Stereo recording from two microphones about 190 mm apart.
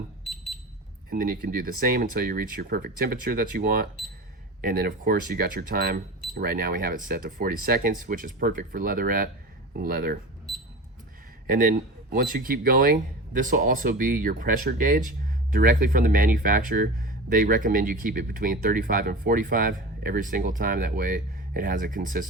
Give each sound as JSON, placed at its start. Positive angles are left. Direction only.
{"t": 1.1, "sound": "speech", "side_deg": -50}
{"t": 12.1, "sound": "speech", "side_deg": -50}